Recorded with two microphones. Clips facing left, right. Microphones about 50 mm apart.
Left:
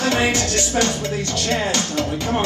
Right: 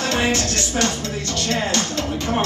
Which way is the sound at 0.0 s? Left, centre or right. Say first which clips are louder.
Left 2 dB; centre.